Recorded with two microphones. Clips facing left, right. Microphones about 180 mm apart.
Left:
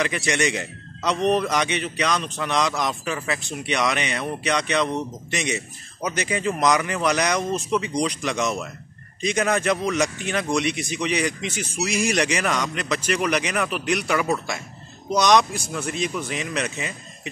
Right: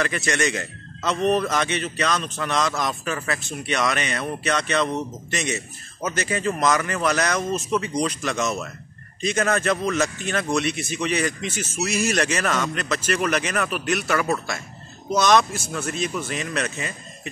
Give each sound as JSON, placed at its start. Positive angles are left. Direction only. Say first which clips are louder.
{"t": 0.0, "sound": "a man's voice", "louder": "even", "side_deg": 15}